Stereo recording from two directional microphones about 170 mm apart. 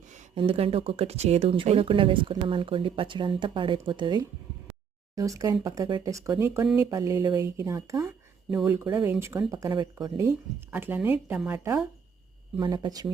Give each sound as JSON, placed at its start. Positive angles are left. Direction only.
{"t": 0.3, "sound": "speech", "side_deg": -35}